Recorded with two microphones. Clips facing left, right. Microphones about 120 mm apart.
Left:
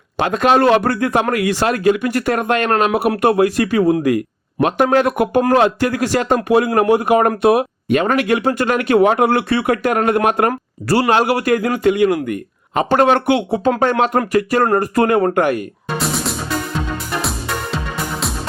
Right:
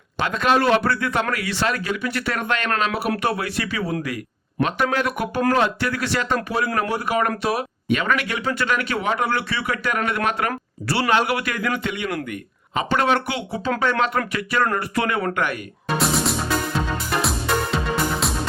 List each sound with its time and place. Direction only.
0.2 s a man's voice: 45° left (ahead or behind)
14.0 s speech: 45° left (ahead or behind)
16.0 s music: centre (ahead or behind)